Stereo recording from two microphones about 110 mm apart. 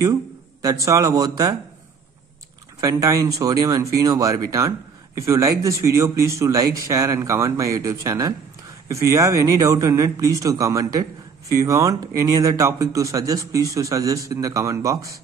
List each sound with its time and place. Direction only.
0.8 s speech: 30° right (ahead or behind)
2.8 s speech: 30° right (ahead or behind)